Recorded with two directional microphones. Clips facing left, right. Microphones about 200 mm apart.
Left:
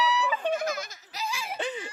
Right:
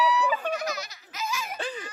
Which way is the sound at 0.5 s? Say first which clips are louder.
Left 2 dB; 50° left (ahead or behind).